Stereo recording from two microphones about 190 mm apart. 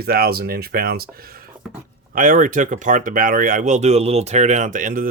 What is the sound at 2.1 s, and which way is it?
Speech, 45° right (ahead or behind).